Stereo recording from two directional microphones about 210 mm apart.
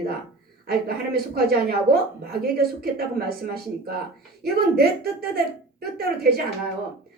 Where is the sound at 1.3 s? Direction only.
45° right (ahead or behind).